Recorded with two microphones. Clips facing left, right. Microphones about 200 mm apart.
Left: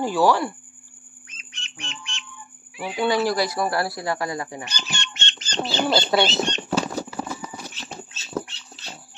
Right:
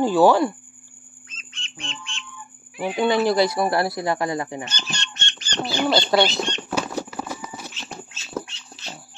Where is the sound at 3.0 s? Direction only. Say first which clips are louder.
Right 3 dB; 20° right (ahead or behind).